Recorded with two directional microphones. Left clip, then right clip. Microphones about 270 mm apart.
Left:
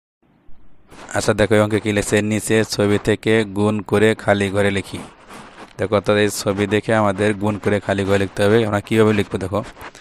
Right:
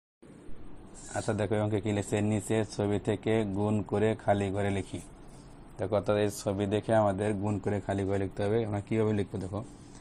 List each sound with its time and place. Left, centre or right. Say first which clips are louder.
1.1 s speech: left 15 dB; left